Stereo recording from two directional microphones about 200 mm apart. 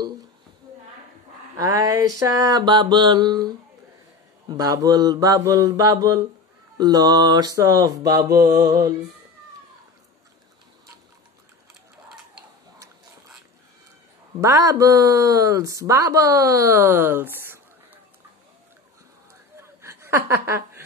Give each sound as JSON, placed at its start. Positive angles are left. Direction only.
{"t": 1.6, "sound": "a sound", "side_deg": -20}
{"t": 14.4, "sound": "speech", "side_deg": -15}
{"t": 19.5, "sound": "chuckle", "side_deg": -15}